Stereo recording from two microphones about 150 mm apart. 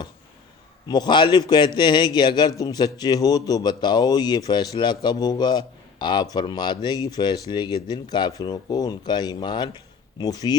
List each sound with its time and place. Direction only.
0.9 s a man's voice: 30° left (ahead or behind)